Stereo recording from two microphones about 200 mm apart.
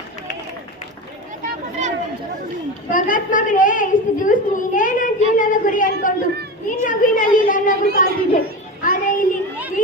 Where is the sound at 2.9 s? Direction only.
40° left (ahead or behind).